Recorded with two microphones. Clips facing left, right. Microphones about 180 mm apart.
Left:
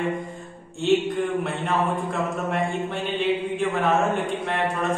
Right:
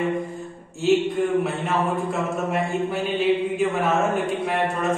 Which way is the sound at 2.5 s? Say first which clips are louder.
Right 2 dB; 5° right (ahead or behind).